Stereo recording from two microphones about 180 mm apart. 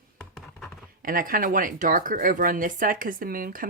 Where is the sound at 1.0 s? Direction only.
50° right (ahead or behind).